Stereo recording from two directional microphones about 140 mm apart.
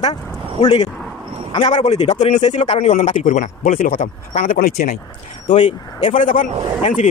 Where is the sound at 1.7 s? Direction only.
55° left (ahead or behind); by 4.9 s 90° left.